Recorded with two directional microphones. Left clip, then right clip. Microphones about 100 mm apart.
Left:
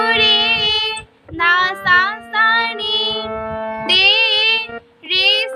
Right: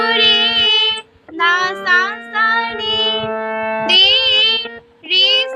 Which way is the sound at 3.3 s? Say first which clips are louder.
Right 4 dB; 20° right (ahead or behind).